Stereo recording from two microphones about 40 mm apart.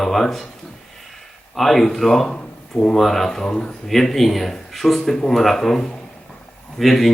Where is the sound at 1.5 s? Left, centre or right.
Centre.